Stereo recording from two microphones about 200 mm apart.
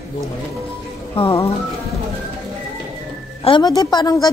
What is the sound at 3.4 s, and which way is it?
Speech, 20° left (ahead or behind).